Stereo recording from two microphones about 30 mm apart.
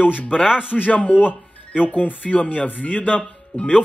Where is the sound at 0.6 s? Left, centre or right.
Left.